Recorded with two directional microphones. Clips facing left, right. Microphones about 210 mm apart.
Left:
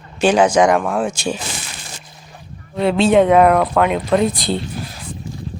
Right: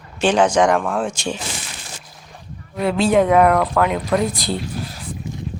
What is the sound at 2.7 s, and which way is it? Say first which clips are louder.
Speech: left 3 dB; 25° left (ahead or behind).